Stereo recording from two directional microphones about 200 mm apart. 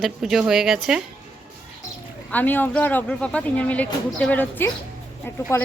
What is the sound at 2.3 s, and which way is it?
Speech, 10° left (ahead or behind).